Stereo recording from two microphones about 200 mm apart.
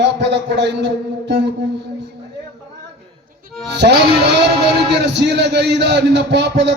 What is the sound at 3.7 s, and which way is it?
A man's voice, 55° right (ahead or behind).